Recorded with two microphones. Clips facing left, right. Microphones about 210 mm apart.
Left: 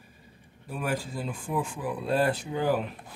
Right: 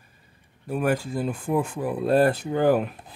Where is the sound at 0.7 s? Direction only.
60° right (ahead or behind).